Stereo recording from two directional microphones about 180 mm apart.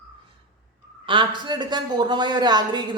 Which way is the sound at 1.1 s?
25° right (ahead or behind).